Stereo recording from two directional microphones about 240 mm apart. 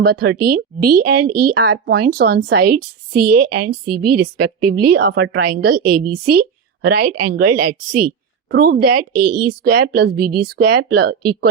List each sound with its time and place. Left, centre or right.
0.0 s a woman's voice: right